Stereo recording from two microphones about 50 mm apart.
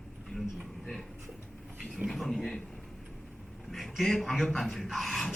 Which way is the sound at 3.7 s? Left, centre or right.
Centre.